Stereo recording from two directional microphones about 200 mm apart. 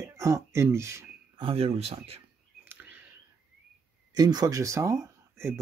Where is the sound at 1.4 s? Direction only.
30° right (ahead or behind).